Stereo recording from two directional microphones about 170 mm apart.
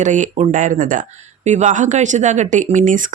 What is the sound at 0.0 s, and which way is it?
Speech, 45° right (ahead or behind).